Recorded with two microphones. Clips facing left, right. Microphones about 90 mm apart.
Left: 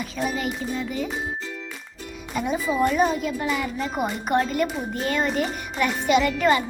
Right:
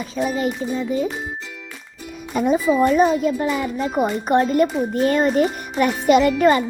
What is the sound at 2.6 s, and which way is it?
Speech, centre (ahead or behind).